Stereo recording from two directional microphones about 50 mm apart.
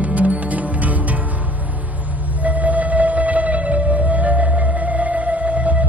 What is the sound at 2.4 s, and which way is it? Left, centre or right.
Music, right.